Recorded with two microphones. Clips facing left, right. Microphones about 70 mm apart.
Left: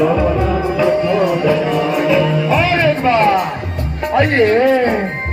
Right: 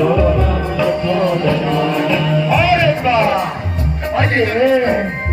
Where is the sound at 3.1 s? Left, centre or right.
Left.